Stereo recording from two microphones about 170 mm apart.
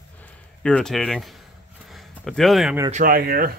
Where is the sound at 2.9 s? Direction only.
55° right (ahead or behind).